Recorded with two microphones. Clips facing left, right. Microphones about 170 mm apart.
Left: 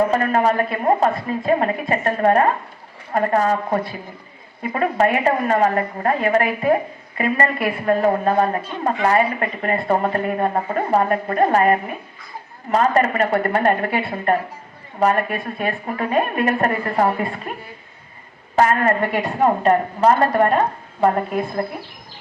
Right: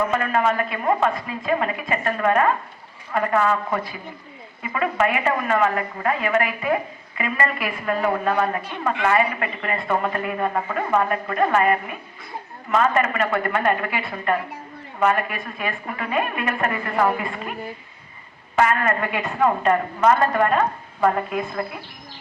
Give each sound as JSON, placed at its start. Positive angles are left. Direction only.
{"t": 0.0, "sound": "speech", "side_deg": 35}
{"t": 18.5, "sound": "speech", "side_deg": 35}